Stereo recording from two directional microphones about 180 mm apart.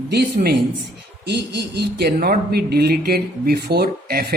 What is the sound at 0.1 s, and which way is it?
Speech, 65° right (ahead or behind).